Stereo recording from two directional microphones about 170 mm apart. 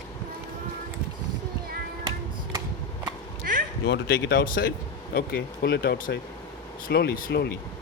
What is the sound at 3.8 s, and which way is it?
Speech, 80° left.